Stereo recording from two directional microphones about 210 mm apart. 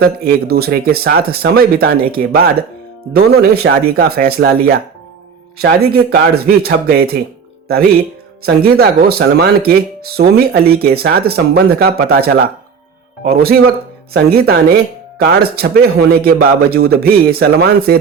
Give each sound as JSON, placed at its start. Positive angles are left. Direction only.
{"t": 0.0, "sound": "speech", "side_deg": -45}
{"t": 8.4, "sound": "speech", "side_deg": -50}